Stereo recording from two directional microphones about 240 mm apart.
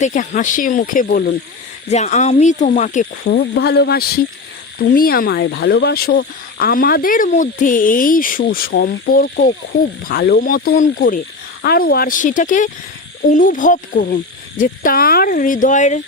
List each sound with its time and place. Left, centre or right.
0.0 s speech: left